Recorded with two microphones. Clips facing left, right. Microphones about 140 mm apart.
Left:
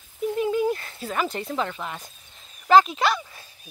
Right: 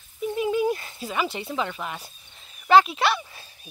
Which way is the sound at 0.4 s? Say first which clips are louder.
Even; 15° right (ahead or behind).